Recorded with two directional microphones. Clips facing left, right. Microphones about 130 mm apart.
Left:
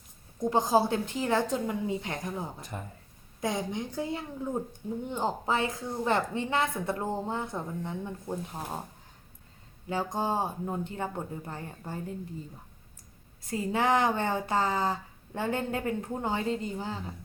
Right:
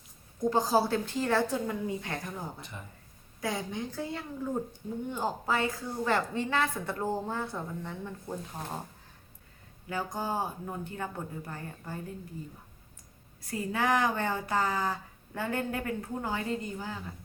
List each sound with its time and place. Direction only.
0.3 s a woman's voice: 20° left (ahead or behind)
2.6 s speech: 40° left (ahead or behind)
3.4 s a woman's voice: 20° left (ahead or behind)
9.9 s a woman's voice: 25° left (ahead or behind)
13.5 s a woman's voice: 25° left (ahead or behind)